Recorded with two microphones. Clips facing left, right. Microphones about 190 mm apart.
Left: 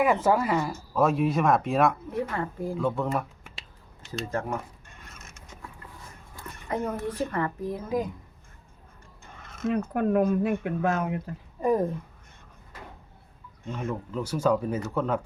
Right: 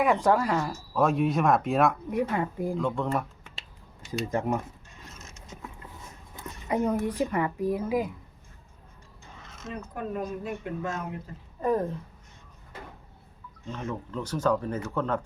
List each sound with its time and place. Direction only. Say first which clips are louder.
0.0 s speech: even; centre (ahead or behind)
2.0 s a woman's voice: right 3 dB; 15° right (ahead or behind)
2.7 s speech: left 2 dB; 5° left (ahead or behind)
4.3 s a woman's voice: right 2 dB; 15° right (ahead or behind)
4.9 s mechanisms: right 1 dB; 55° left (ahead or behind)
6.3 s a sound: right 2 dB; 20° right (ahead or behind)
6.7 s a woman's voice: right 3 dB; 15° right (ahead or behind)
9.2 s speech: left 12 dB; 55° left (ahead or behind)
11.6 s speech: left 2 dB; 10° left (ahead or behind)
13.7 s speech: left 2 dB; 10° left (ahead or behind)